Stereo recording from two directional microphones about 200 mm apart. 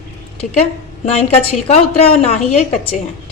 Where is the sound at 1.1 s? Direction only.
30° left (ahead or behind).